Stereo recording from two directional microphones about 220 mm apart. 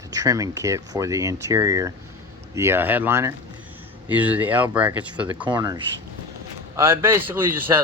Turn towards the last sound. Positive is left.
turn(degrees=-10)  # may be behind; listen again after turning